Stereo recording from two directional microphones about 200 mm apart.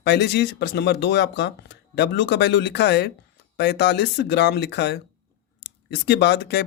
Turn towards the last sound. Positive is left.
turn(degrees=60)  # may be behind; listen again after turning